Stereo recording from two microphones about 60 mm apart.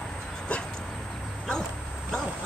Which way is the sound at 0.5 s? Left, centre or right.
Centre.